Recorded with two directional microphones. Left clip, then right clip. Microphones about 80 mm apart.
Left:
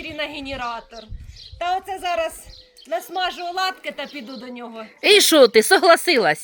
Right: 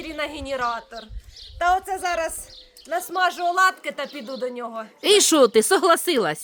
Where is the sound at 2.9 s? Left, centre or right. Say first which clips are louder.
Right 2 dB; right.